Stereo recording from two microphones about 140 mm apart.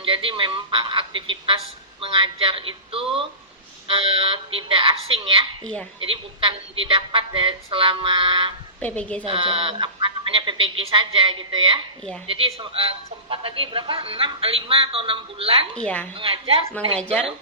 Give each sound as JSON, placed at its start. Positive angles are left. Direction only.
{"t": 0.0, "sound": "a man's voice", "side_deg": -40}
{"t": 8.8, "sound": "a woman's voice", "side_deg": 10}
{"t": 9.2, "sound": "a man's voice", "side_deg": -40}
{"t": 15.7, "sound": "a woman's voice", "side_deg": 10}
{"t": 16.1, "sound": "a man's voice", "side_deg": -40}
{"t": 17.0, "sound": "a woman's voice", "side_deg": 10}